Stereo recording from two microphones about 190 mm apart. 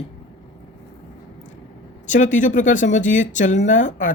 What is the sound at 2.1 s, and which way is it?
Speech, 40° left (ahead or behind).